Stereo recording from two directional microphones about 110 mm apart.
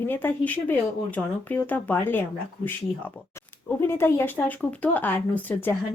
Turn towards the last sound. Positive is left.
turn(degrees=15)  # may be behind; listen again after turning